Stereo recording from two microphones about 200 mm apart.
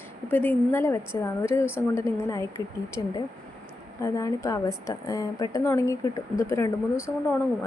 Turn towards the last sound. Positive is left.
turn(degrees=10)  # may be behind; listen again after turning